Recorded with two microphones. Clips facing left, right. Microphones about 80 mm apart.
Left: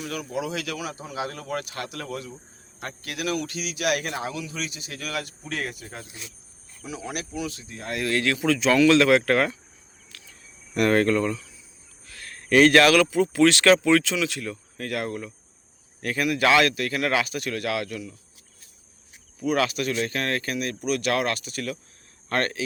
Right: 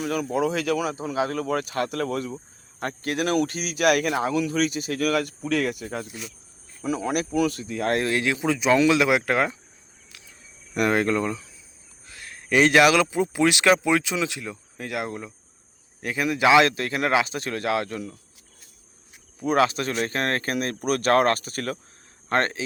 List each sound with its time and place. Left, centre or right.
0.0 s a man's voice: right
6.8 s a man's voice: right
8.0 s speech: centre
10.8 s speech: centre; by 18.1 s right
19.4 s speech: right
22.3 s speech: right